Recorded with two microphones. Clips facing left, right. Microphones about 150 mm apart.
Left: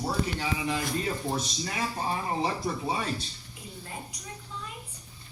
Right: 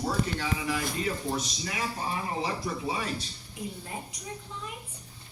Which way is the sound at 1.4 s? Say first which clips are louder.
Left 1 dB; 30° left (ahead or behind).